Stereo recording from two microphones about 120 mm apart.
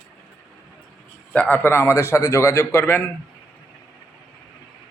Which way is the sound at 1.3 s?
10° left (ahead or behind).